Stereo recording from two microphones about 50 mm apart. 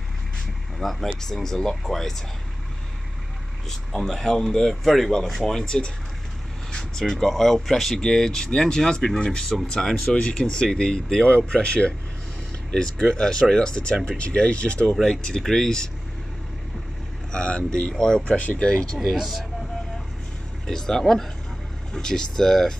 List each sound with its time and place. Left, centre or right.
0.7 s speech: centre
3.6 s speech: centre
17.3 s speech: centre
18.2 s speech: left
19.0 s speech: centre
20.6 s speech: centre